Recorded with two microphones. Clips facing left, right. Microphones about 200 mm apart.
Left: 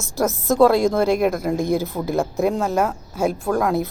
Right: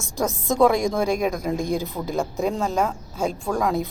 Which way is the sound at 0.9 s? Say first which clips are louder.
Left 4 dB; 5° left (ahead or behind).